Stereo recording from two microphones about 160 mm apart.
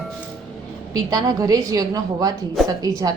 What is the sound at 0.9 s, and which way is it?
A woman's voice, 25° right (ahead or behind).